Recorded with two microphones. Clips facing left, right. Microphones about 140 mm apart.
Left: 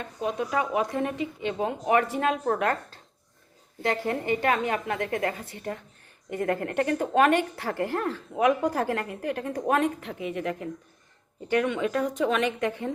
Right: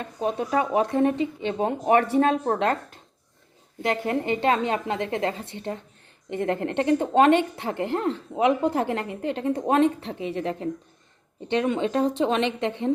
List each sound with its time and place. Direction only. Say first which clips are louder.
0.0 s a woman's voice: right 2 dB; 30° right (ahead or behind)